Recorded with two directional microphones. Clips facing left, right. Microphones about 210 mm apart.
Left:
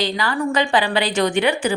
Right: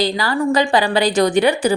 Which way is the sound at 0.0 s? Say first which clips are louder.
Right 3 dB; 40° right (ahead or behind).